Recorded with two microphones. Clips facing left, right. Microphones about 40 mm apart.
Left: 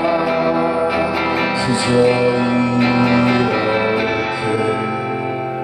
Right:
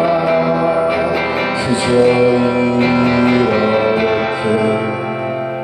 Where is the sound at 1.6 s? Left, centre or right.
Right.